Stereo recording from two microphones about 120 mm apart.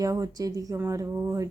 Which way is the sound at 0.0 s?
30° right (ahead or behind).